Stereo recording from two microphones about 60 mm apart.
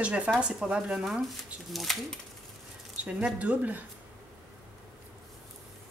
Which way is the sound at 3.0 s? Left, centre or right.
Centre.